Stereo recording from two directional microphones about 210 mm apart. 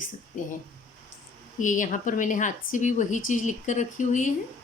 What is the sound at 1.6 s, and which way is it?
Speech, 40° left (ahead or behind).